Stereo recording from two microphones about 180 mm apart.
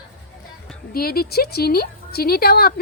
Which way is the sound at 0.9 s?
55° left (ahead or behind).